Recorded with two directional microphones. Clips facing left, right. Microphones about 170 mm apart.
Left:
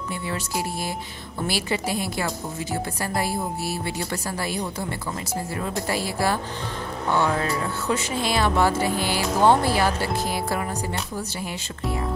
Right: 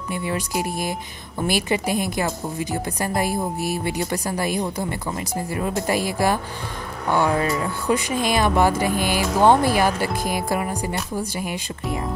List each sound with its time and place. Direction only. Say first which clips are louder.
0.1 s speech: right 5 dB; 15° right (ahead or behind)